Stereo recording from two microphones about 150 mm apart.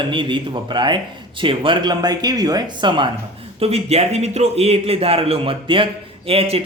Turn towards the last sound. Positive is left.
turn(degrees=-40)  # may be behind; listen again after turning